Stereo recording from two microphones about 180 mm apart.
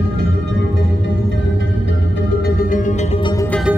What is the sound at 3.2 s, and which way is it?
Music, 25° left (ahead or behind).